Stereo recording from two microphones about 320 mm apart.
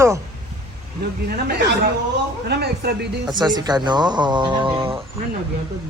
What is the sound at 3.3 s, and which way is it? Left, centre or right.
Speech, centre.